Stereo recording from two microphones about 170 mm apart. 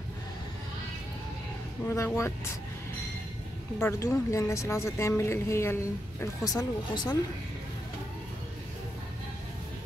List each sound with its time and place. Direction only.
1.9 s speech: 15° left (ahead or behind)
3.8 s speech: 20° left (ahead or behind)